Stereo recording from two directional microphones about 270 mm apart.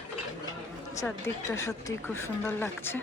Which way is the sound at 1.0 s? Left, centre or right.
Centre.